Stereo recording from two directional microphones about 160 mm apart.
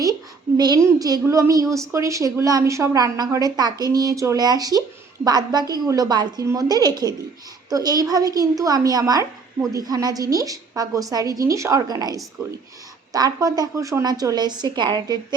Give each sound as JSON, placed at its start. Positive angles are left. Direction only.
{"t": 0.0, "sound": "a woman's voice", "side_deg": -25}